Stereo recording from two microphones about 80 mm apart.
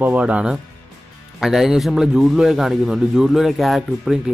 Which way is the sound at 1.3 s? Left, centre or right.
Centre.